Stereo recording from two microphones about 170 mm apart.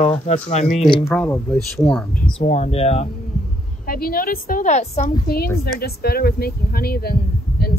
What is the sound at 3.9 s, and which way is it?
Speech, 60° left (ahead or behind).